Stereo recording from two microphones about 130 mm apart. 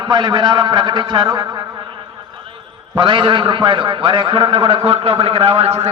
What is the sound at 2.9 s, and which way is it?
A man's voice, 40° right (ahead or behind).